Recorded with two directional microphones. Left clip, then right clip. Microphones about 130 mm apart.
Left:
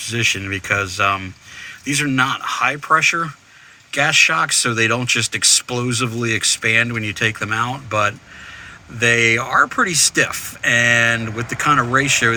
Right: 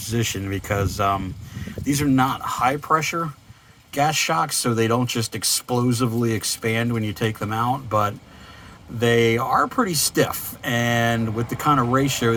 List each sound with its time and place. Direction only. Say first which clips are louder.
0.0 s speech: left 7 dB; 40° right (ahead or behind)
9.4 s speech: left 4 dB; 15° right (ahead or behind)
9.8 s speech: left 5 dB; 35° right (ahead or behind)